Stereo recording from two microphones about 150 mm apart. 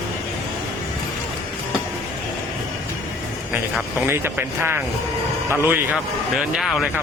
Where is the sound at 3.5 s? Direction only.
15° right (ahead or behind).